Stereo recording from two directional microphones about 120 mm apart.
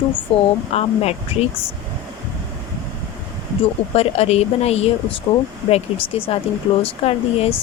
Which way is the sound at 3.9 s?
60° left (ahead or behind).